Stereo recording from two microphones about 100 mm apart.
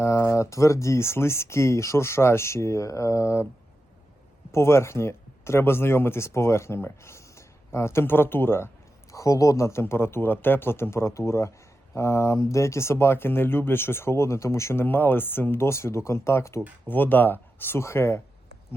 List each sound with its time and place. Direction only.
0.0 s speech: 25° left (ahead or behind)
4.5 s speech: 25° left (ahead or behind)
9.1 s speech: 35° left (ahead or behind)